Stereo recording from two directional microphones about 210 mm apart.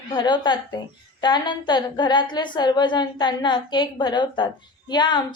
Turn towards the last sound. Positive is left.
turn(degrees=20)  # may be behind; listen again after turning